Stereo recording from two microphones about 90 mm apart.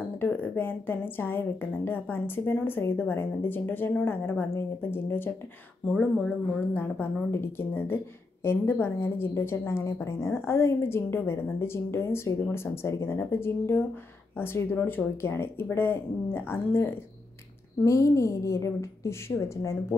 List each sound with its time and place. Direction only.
0.2 s a woman's voice: 25° left (ahead or behind)
5.9 s speech: 10° left (ahead or behind)
6.7 s a woman's voice: 25° left (ahead or behind)